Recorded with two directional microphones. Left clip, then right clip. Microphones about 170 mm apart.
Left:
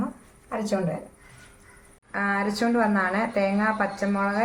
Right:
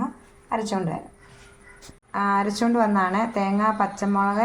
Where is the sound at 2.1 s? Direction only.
65° right (ahead or behind).